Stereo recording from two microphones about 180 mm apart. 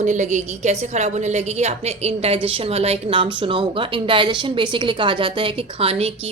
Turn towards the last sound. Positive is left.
turn(degrees=-30)  # may be behind; listen again after turning